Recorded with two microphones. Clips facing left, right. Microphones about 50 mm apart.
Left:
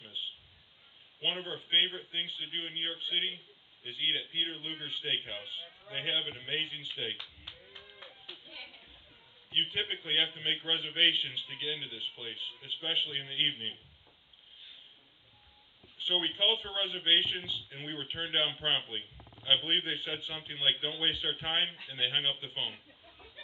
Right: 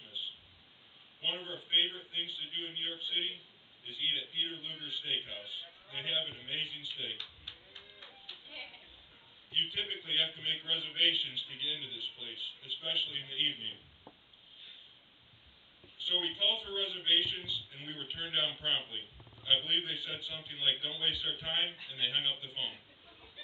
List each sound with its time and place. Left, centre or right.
0.0 s a sound: left
1.2 s a man's voice: left
7.2 s clapping: left
9.5 s a man's voice: left
16.0 s a man's voice: left